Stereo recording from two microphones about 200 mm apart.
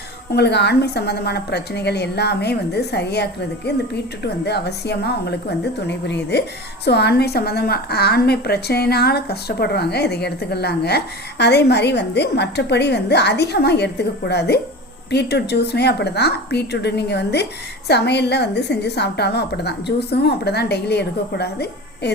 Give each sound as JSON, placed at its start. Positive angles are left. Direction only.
{"t": 0.3, "sound": "a woman's voice", "side_deg": 55}